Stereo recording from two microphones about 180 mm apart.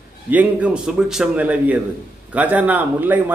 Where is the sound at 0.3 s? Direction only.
10° right (ahead or behind).